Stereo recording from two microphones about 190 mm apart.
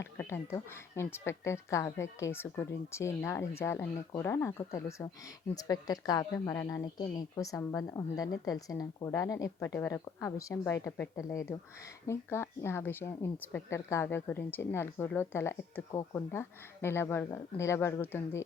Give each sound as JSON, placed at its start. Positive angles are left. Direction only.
{"t": 0.0, "sound": "a woman's voice", "side_deg": 15}